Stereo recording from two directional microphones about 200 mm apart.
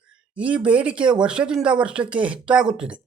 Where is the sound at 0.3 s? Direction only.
5° right (ahead or behind).